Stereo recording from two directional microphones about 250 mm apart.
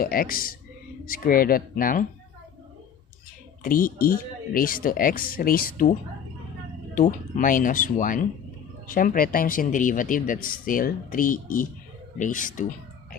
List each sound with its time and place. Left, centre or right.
0.0 s speech: left
3.6 s speech: left